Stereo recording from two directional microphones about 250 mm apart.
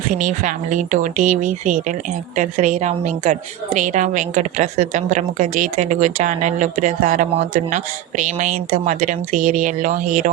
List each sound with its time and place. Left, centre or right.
0.1 s a woman's voice: right